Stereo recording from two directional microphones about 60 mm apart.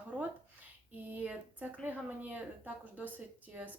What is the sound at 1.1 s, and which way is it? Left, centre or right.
A woman's voice, right.